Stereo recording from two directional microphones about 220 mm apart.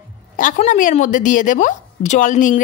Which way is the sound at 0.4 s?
35° left (ahead or behind).